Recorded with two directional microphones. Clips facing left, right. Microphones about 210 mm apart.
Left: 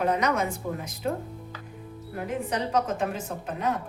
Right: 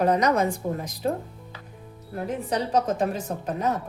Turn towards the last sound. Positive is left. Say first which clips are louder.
# right 3 dB
turn(degrees=-40)  # may be behind; listen again after turning